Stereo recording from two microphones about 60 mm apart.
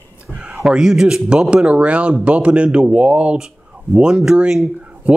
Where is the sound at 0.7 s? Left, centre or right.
Centre.